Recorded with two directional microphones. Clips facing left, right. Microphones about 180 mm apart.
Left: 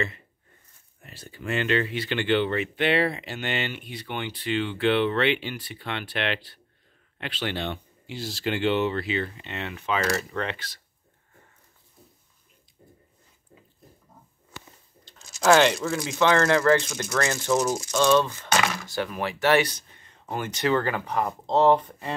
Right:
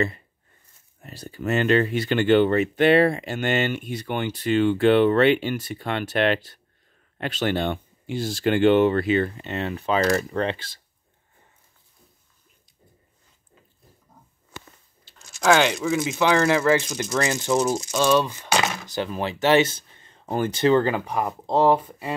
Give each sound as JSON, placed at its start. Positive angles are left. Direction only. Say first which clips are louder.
{"t": 1.0, "sound": "speech", "louder": "right 6 dB", "side_deg": -40}
{"t": 15.0, "sound": "speech", "louder": "even", "side_deg": 0}